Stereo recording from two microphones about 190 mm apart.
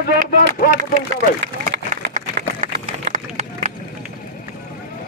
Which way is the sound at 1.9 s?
50° right (ahead or behind).